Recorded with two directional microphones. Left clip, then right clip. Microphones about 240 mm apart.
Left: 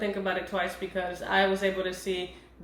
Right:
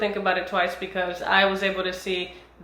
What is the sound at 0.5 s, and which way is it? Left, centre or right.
Speech, centre.